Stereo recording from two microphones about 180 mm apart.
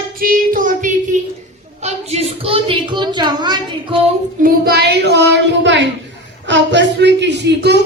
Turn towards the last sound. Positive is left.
turn(degrees=-70)  # may be behind; listen again after turning